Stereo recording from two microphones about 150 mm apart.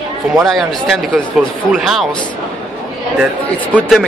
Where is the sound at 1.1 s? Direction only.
Centre (ahead or behind).